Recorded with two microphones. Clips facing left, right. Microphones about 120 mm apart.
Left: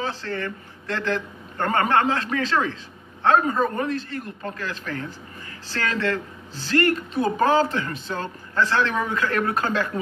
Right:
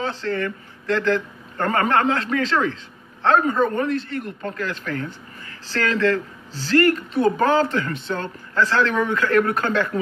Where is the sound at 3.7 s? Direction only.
30° left (ahead or behind).